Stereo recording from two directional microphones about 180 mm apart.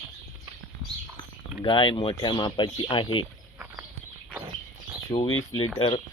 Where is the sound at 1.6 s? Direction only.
25° left (ahead or behind).